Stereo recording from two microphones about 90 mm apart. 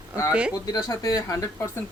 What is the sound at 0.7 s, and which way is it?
Speech, 40° left (ahead or behind).